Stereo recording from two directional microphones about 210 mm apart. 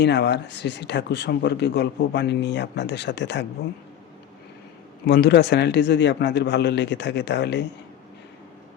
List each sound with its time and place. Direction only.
0.0 s speech: 55° left (ahead or behind)
5.0 s a man's voice: 50° left (ahead or behind)